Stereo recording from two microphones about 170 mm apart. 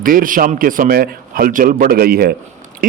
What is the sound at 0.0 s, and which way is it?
Speech, 55° right (ahead or behind).